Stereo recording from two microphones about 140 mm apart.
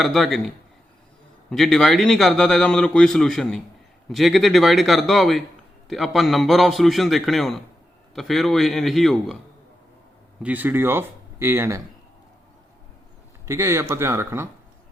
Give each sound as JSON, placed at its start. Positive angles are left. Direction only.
{"t": 0.0, "sound": "a man's voice", "side_deg": 0}
{"t": 10.4, "sound": "speech", "side_deg": -10}
{"t": 13.4, "sound": "speech", "side_deg": -20}